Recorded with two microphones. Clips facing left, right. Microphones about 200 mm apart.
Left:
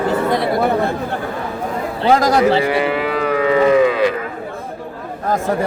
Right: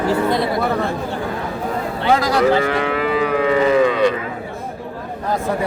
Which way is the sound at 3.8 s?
5° left (ahead or behind).